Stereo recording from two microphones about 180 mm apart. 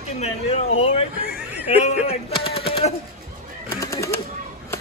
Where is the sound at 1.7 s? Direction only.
35° left (ahead or behind).